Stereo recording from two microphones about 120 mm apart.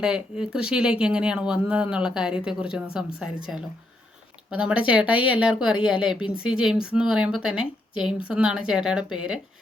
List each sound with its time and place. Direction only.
0.0 s speech: 5° right (ahead or behind)
4.9 s speech: 10° right (ahead or behind)